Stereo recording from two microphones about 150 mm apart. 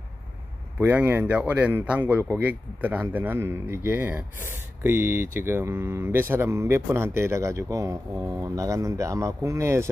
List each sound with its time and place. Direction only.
0.7 s speech: 15° right (ahead or behind)